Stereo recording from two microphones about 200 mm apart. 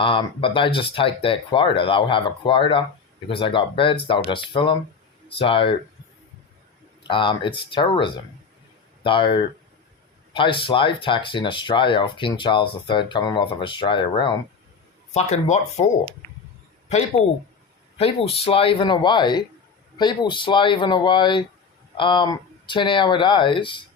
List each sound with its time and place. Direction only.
0.0 s speech: 25° left (ahead or behind)
7.0 s speech: 25° left (ahead or behind)
15.1 s speech: 35° left (ahead or behind)
17.9 s speech: 30° left (ahead or behind)